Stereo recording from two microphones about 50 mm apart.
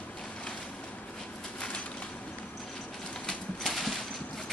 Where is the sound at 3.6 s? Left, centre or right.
Centre.